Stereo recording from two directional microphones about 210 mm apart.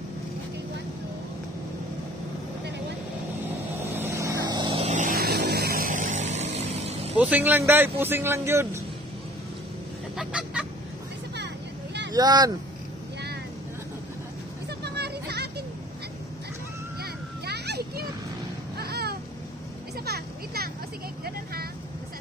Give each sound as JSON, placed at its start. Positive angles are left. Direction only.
{"t": 3.8, "sound": "vehicle", "side_deg": -10}
{"t": 7.2, "sound": "speech", "side_deg": -10}
{"t": 10.1, "sound": "goose", "side_deg": -5}
{"t": 12.1, "sound": "speech", "side_deg": -20}
{"t": 14.8, "sound": "music", "side_deg": -50}
{"t": 17.0, "sound": "a sound", "side_deg": -50}